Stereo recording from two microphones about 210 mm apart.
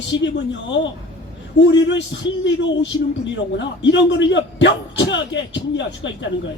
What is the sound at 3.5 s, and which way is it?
A man's voice, 60° left (ahead or behind).